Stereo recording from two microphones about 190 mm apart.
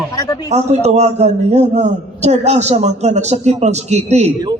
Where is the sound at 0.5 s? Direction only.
35° right (ahead or behind).